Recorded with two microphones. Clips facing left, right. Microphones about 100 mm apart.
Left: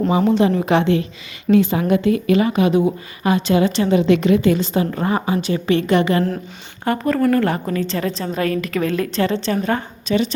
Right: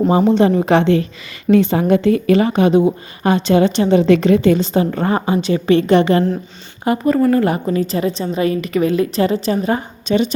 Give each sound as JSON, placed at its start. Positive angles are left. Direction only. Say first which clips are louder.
{"t": 0.3, "sound": "a woman's voice", "louder": "right 3 dB", "side_deg": -35}
{"t": 4.0, "sound": "a woman's voice", "louder": "right 2 dB", "side_deg": -35}
{"t": 6.8, "sound": "a woman's voice", "louder": "right 3 dB", "side_deg": -5}